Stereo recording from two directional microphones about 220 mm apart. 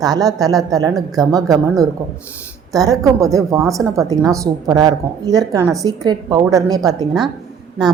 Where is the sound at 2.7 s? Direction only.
15° right (ahead or behind).